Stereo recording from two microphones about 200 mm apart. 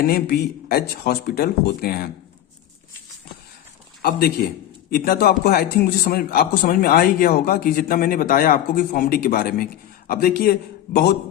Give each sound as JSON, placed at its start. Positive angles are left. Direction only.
{"t": 0.0, "sound": "a man's voice", "side_deg": 50}
{"t": 4.0, "sound": "a man's voice", "side_deg": 50}